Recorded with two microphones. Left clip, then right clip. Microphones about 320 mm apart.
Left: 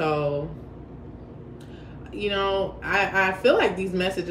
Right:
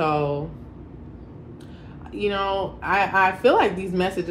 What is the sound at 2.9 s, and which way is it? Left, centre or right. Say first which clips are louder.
Speech: right 3 dB; centre.